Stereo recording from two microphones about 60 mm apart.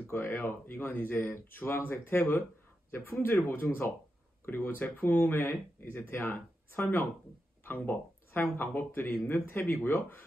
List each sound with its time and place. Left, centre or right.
0.1 s speech: left